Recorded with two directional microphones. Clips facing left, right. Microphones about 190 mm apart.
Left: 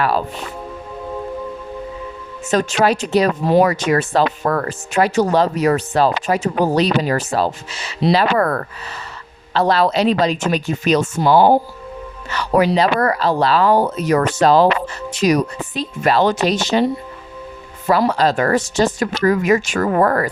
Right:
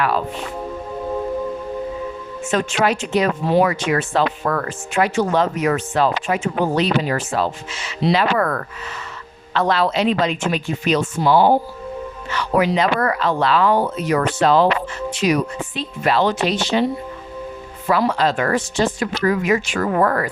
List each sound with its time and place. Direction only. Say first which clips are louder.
2.5 s speech: left 3 dB; 40° left (ahead or behind)
17.8 s speech: left 2 dB; 40° left (ahead or behind)